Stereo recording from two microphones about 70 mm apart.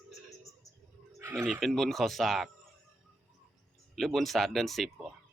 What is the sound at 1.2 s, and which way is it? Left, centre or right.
Neigh, right.